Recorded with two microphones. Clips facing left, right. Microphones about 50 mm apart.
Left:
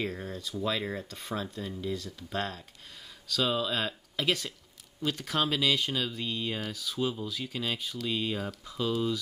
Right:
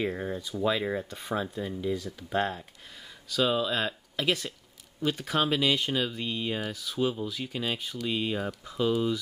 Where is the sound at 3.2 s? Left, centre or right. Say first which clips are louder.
Right 3 dB; centre.